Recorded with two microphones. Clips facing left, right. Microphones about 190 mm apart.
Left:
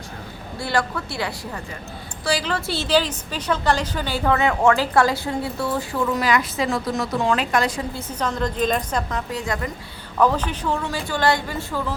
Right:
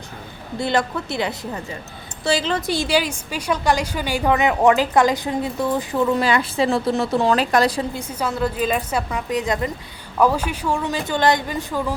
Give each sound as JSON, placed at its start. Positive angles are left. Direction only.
{"t": 0.6, "sound": "a woman's voice", "side_deg": -20}
{"t": 7.9, "sound": "a woman's voice", "side_deg": -10}